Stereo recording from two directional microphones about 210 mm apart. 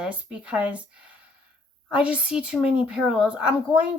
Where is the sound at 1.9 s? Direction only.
5° right (ahead or behind).